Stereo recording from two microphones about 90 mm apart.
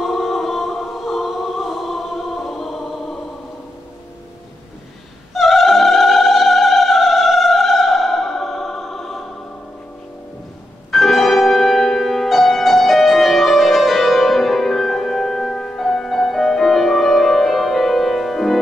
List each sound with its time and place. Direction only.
0.0 s choir: centre (ahead or behind)
5.3 s opera: centre (ahead or behind)
10.9 s music: centre (ahead or behind)